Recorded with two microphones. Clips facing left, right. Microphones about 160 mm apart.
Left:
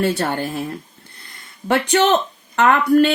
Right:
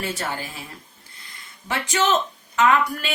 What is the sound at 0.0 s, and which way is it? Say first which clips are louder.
Speech: left 9 dB; 65° left (ahead or behind).